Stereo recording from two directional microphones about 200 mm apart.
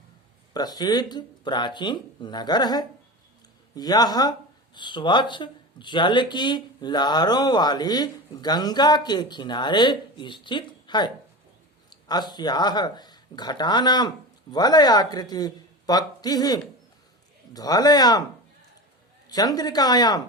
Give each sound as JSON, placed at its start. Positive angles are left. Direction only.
{"t": 0.5, "sound": "speech", "side_deg": 20}
{"t": 19.3, "sound": "speech", "side_deg": 20}